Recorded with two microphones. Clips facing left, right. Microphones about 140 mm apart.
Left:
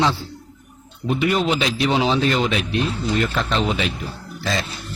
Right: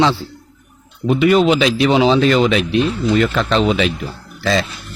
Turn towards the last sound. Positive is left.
turn(degrees=-90)